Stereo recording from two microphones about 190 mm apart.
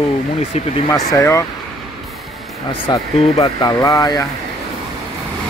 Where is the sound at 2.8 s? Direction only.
25° left (ahead or behind).